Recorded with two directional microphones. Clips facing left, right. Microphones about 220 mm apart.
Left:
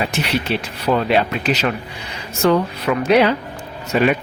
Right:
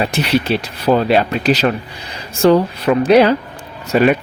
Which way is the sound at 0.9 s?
35° right (ahead or behind).